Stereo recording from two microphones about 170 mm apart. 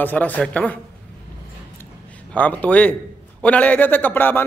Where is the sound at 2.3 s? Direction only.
10° left (ahead or behind).